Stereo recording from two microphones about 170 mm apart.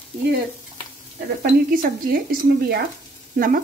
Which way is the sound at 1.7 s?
55° right (ahead or behind).